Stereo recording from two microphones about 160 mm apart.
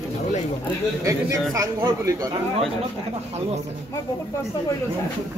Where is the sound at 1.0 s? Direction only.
20° right (ahead or behind).